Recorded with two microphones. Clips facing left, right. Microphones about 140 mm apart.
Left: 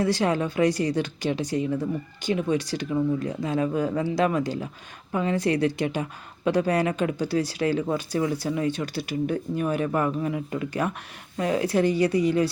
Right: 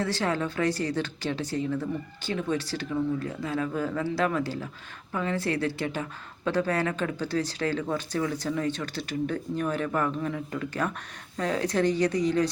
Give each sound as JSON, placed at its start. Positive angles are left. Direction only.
{"t": 0.0, "sound": "a woman's voice", "side_deg": 15}